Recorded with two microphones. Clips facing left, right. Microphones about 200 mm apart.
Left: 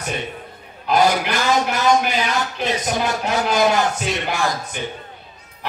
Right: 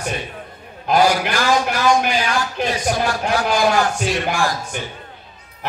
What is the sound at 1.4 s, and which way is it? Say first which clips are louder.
Speech: right 1 dB; 20° left (ahead or behind).